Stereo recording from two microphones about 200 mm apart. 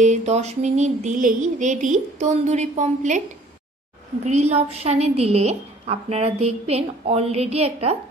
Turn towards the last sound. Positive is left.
turn(degrees=-30)  # may be behind; listen again after turning